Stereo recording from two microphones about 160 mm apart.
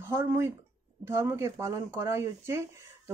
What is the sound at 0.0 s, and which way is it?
Speech, 15° right (ahead or behind).